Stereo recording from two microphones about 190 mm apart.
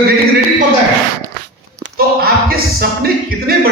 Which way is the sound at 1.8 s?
55° right (ahead or behind).